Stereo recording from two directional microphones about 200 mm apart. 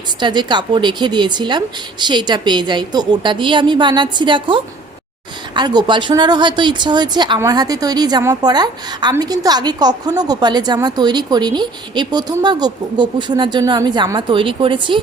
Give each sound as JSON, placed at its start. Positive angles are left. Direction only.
{"t": 0.2, "sound": "speech", "side_deg": -20}